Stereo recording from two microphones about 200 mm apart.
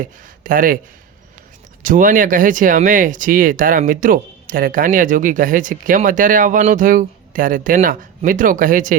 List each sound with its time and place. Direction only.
0.0 s speech: 45° right (ahead or behind)
1.8 s speech: 40° right (ahead or behind)